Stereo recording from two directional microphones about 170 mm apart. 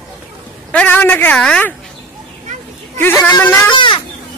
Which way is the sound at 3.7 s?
30° left (ahead or behind).